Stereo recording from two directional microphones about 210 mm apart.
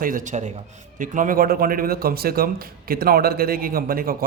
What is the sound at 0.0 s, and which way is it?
A man's voice, 40° right (ahead or behind).